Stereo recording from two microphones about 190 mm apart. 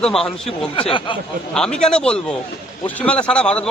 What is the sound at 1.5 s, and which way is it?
A man's voice, 5° left (ahead or behind).